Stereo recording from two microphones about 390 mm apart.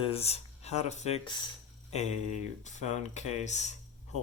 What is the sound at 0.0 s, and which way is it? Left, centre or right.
Speech, centre.